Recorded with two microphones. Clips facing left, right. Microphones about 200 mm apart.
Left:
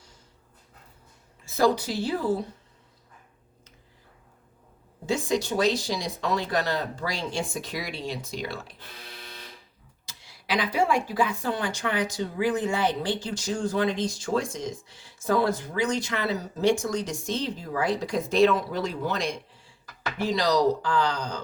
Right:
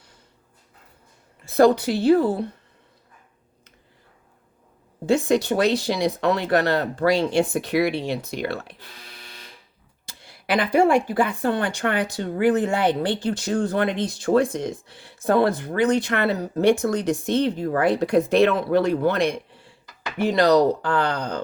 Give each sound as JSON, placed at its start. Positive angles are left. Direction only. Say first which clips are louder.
{"t": 1.5, "sound": "speech", "louder": "right 7 dB", "side_deg": -60}
{"t": 5.0, "sound": "speech", "louder": "right 7 dB", "side_deg": -60}
{"t": 10.1, "sound": "speech", "louder": "right 5 dB", "side_deg": -55}